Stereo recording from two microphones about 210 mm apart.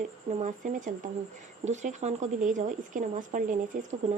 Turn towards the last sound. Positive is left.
turn(degrees=-35)  # may be behind; listen again after turning